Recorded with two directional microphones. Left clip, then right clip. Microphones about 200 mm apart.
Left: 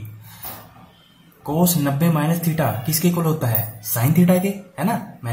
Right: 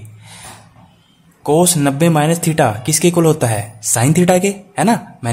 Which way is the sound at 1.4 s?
50° right (ahead or behind).